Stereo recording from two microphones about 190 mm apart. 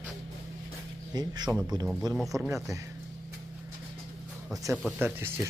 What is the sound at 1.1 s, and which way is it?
Speech, 20° right (ahead or behind).